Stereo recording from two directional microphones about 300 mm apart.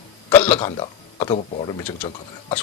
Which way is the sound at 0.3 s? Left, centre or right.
Centre.